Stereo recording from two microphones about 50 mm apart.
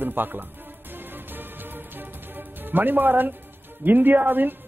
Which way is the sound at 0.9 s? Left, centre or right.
Right.